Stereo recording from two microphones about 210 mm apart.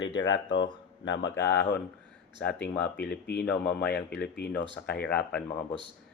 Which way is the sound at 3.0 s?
50° left (ahead or behind).